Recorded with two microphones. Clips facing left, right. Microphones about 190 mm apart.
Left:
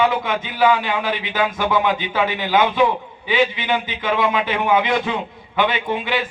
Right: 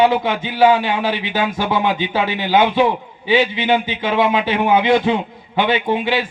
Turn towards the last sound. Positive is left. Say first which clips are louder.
# right 4 dB
turn(degrees=-30)  # may be behind; listen again after turning